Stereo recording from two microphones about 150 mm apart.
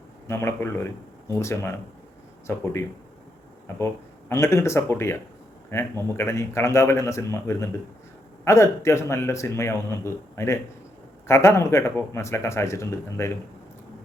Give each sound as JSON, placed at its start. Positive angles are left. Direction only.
{"t": 0.3, "sound": "speech", "side_deg": 15}
{"t": 4.3, "sound": "speech", "side_deg": 20}